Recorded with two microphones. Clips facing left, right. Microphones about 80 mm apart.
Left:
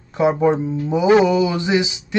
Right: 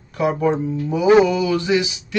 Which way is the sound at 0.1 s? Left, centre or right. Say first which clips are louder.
Left 3 dB; left.